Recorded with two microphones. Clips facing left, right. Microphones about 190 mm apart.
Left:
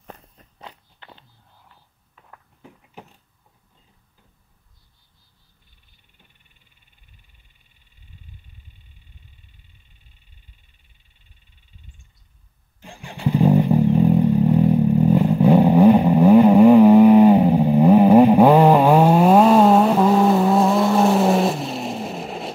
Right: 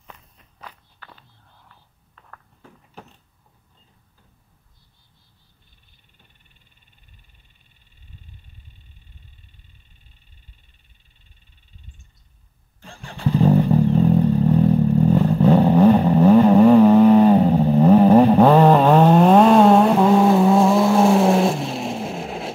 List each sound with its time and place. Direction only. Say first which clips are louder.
0.0 s walk: left 5 dB; 45° left (ahead or behind)
0.6 s walk: left 1 dB; 25° left (ahead or behind)
2.1 s a sound: right 1 dB; 15° left (ahead or behind)
12.8 s vehicle: even; 15° left (ahead or behind); by 22.5 s centre (ahead or behind)